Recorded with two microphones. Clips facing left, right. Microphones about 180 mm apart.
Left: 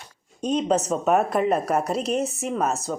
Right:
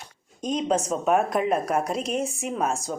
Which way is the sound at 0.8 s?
Centre (ahead or behind).